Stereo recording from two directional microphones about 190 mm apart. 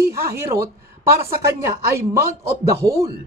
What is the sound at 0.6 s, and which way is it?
Speech, 15° right (ahead or behind).